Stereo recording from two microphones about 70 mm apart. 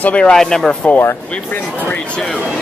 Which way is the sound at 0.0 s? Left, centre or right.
Centre.